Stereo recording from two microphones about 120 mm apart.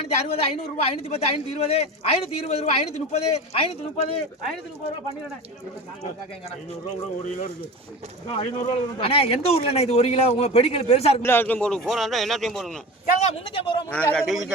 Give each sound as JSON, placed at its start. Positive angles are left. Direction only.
{"t": 0.0, "sound": "speech", "side_deg": 55}
{"t": 8.4, "sound": "speech", "side_deg": 50}
{"t": 11.2, "sound": "speech", "side_deg": 20}
{"t": 13.4, "sound": "speech", "side_deg": 45}
{"t": 13.9, "sound": "speech", "side_deg": 5}